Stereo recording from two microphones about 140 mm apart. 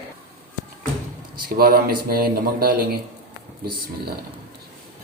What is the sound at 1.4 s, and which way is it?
Speech, 90° right.